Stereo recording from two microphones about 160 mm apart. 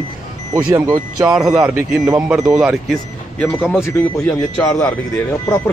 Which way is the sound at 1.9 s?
20° right (ahead or behind).